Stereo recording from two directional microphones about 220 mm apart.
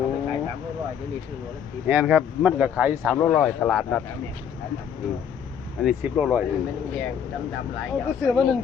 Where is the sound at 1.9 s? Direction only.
10° right (ahead or behind).